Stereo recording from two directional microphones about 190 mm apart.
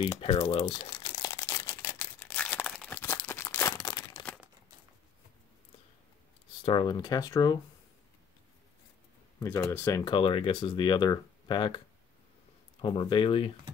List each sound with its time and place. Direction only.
0.2 s speech: 25° left (ahead or behind)
0.8 s a sound: 20° left (ahead or behind)
6.6 s speech: 25° left (ahead or behind)
9.4 s speech: 15° left (ahead or behind)
12.8 s speech: 25° left (ahead or behind)